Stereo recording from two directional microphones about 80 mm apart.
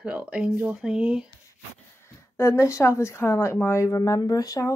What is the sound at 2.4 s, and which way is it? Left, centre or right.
Speech, left.